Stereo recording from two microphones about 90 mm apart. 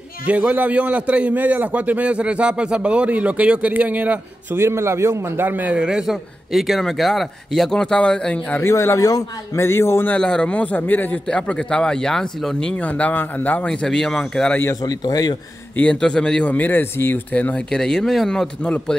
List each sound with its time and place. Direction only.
0.3 s a man's voice: 15° right (ahead or behind)
4.6 s a man's voice: 30° right (ahead or behind); by 8.6 s 10° left (ahead or behind)
8.6 s a man's voice: 30° left (ahead or behind)
10.1 s speech: 10° left (ahead or behind)
13.7 s speech: 5° left (ahead or behind)
14.8 s speech: 45° left (ahead or behind)
15.7 s speech: 15° left (ahead or behind)